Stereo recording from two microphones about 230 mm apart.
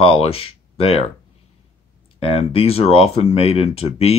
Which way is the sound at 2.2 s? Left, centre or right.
Left.